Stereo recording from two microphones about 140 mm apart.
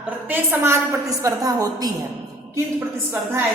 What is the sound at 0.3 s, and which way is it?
A woman's voice, 20° right (ahead or behind).